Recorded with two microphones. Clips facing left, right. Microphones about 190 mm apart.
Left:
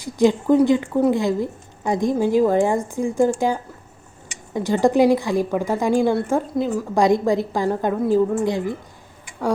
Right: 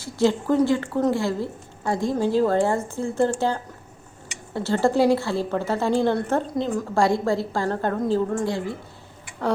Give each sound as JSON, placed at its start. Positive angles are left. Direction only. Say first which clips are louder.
{"t": 0.0, "sound": "a woman's voice", "louder": "left 4 dB", "side_deg": 15}
{"t": 6.9, "sound": "a woman's voice", "louder": "left 4 dB", "side_deg": 15}